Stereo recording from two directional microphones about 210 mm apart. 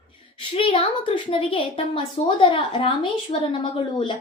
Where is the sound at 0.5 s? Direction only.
25° left (ahead or behind).